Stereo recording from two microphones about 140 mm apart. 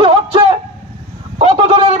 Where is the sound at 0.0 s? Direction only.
40° right (ahead or behind).